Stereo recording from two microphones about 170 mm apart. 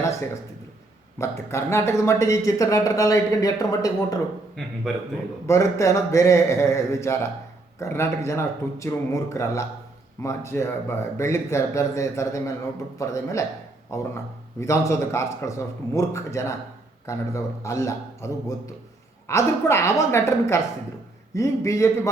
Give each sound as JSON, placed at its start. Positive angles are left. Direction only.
{"t": 0.0, "sound": "a sound", "side_deg": 15}
{"t": 1.2, "sound": "speech", "side_deg": 15}
{"t": 4.6, "sound": "a man's voice", "side_deg": 0}
{"t": 5.5, "sound": "speech", "side_deg": 15}